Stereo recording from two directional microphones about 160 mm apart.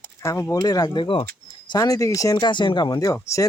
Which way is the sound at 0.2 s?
15° left (ahead or behind).